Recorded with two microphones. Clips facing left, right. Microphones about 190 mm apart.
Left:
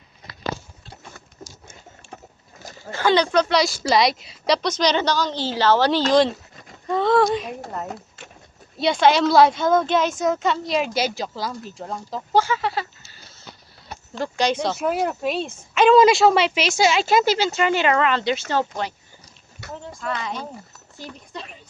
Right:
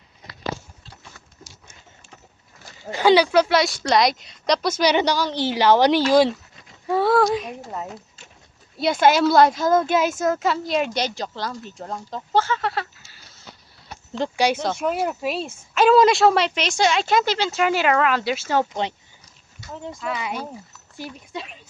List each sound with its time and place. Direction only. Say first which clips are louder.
1.5 s a sound: left 5 dB; 55° left (ahead or behind)
2.9 s a woman's voice: right 3 dB; 15° right (ahead or behind)
8.8 s speech: even; 5° right (ahead or behind)
12.3 s speech: left 1 dB; 10° left (ahead or behind)
12.6 s speech: left 1 dB; centre (ahead or behind)
14.2 s a woman's voice: right 1 dB; 10° right (ahead or behind)
19.6 s a sound: left 1 dB; 65° left (ahead or behind)
20.0 s a woman's voice: even; 5° right (ahead or behind)